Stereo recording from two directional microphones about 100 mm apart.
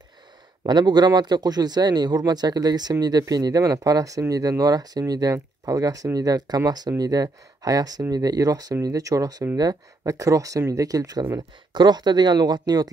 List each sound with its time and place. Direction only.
0.7 s speech: 45° right (ahead or behind)